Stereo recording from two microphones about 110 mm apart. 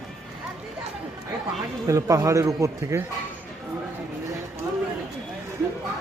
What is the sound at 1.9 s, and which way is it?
A man's voice, 30° right (ahead or behind).